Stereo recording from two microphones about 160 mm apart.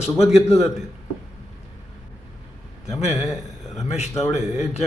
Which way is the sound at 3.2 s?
Centre (ahead or behind).